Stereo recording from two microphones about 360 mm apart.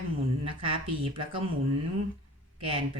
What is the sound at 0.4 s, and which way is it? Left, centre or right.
Speech, centre.